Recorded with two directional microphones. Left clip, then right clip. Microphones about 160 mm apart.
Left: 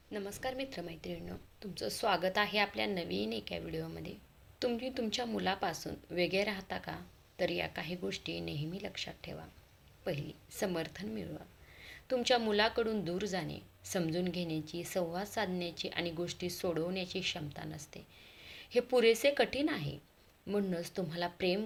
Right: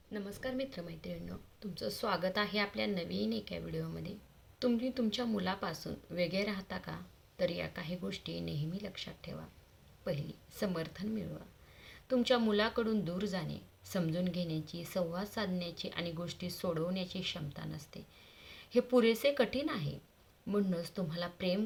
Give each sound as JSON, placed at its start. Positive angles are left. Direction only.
{"t": 0.1, "sound": "a woman's voice", "side_deg": 20}